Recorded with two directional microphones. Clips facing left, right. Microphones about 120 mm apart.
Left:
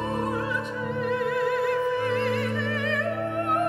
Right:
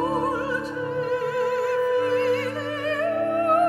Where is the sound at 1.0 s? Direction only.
35° right (ahead or behind).